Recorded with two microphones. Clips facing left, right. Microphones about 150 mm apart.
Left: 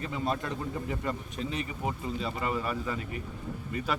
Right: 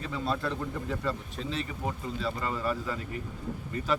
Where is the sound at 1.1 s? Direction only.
15° left (ahead or behind).